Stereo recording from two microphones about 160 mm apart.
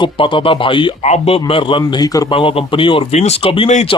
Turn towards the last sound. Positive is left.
turn(degrees=35)  # may be behind; listen again after turning